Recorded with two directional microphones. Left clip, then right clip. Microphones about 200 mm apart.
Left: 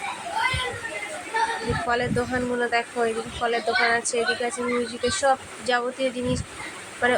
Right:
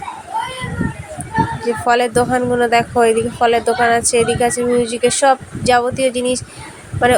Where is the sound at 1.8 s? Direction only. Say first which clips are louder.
Right 13 dB; 35° right (ahead or behind).